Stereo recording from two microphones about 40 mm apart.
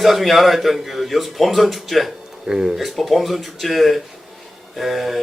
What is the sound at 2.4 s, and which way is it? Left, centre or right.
Speech, centre.